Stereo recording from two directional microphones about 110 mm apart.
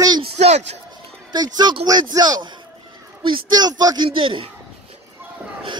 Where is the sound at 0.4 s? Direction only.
80° right.